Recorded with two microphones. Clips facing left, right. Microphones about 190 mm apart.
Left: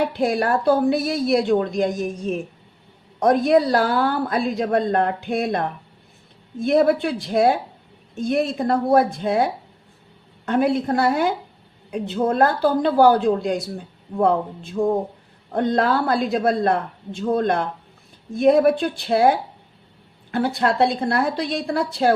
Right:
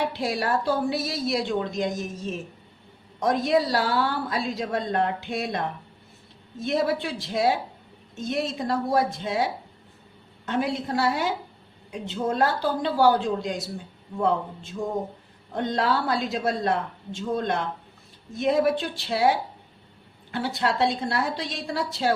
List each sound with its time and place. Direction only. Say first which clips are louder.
0.1 s a woman's voice: left 6 dB; 50° left (ahead or behind)